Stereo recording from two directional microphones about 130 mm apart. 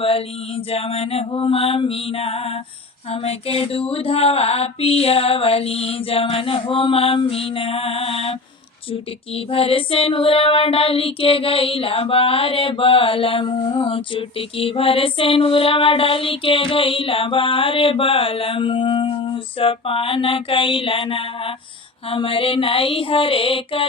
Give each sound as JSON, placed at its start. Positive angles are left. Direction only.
{"t": 0.0, "sound": "female singing", "side_deg": 45}